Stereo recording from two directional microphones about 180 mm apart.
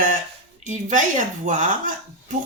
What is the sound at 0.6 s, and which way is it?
Speech, 45° right (ahead or behind).